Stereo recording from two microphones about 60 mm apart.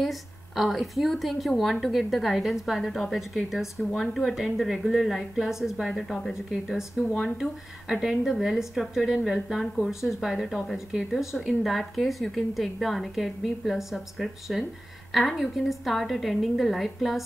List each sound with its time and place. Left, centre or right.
0.0 s speech: centre